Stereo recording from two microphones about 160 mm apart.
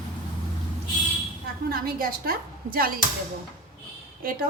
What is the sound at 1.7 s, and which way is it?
A woman's voice, 65° right (ahead or behind).